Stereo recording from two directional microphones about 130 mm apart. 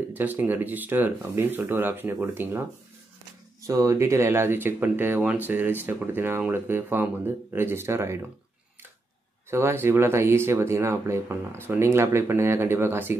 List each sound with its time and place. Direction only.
0.1 s speech: 15° right (ahead or behind)
3.6 s speech: 25° right (ahead or behind)
9.5 s speech: 20° right (ahead or behind)